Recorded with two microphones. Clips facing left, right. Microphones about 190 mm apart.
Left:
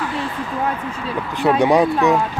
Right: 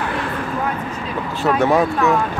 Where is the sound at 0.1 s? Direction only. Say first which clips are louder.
Right 1 dB; 60° right (ahead or behind).